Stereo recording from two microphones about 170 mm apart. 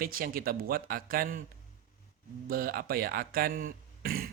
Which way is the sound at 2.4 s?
60° right (ahead or behind).